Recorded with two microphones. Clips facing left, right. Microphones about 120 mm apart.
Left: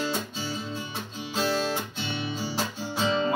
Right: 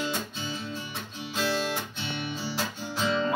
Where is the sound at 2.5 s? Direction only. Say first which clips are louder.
Left 2 dB; 30° left (ahead or behind).